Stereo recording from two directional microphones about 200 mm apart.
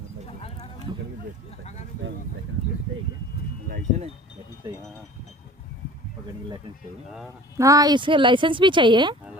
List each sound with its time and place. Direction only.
0.3 s clip-clop: 30° left (ahead or behind)
2.0 s a sound: 70° right (ahead or behind)
3.7 s speech: 35° right (ahead or behind)
7.5 s speech: 15° right (ahead or behind)